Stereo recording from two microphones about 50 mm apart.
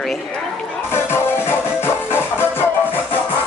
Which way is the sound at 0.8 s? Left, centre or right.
Left.